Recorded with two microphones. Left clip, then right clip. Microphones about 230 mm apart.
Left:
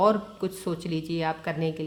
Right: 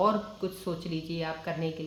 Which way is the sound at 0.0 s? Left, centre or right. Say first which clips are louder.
Left 4 dB; left.